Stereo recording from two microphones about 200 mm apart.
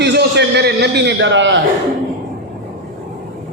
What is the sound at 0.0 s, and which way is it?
A man's voice, 55° right (ahead or behind).